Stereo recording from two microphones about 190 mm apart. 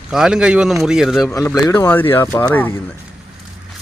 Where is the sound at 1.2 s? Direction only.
20° left (ahead or behind).